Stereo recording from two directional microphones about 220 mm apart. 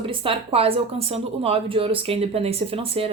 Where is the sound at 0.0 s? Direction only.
25° right (ahead or behind).